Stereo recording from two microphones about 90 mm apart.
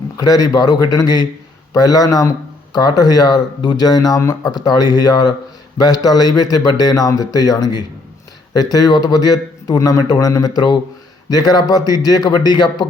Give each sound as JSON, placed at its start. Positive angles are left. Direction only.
{"t": 0.2, "sound": "a man's voice", "side_deg": 45}